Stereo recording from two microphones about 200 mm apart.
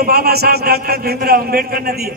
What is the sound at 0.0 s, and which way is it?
A man's voice, 50° right (ahead or behind).